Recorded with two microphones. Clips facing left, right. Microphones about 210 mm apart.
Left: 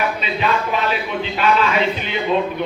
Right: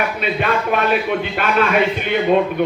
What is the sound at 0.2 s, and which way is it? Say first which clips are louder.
A man's voice: right 1 dB; 55° right (ahead or behind).